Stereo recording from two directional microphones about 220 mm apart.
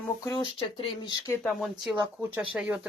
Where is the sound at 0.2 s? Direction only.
20° left (ahead or behind).